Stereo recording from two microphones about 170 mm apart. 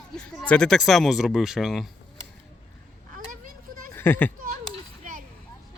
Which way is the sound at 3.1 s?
55° right (ahead or behind).